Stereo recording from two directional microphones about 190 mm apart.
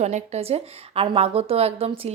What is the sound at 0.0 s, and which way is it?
A woman's voice, 35° right (ahead or behind).